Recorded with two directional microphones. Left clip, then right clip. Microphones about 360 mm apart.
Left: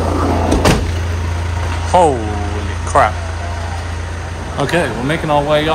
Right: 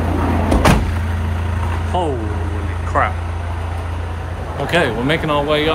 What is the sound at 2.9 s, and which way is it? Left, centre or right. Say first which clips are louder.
Speech: left 6 dB; centre.